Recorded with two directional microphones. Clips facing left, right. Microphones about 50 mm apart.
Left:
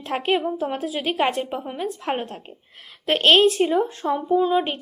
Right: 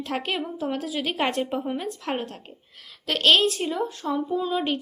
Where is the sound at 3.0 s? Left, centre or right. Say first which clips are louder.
Left 4 dB; left.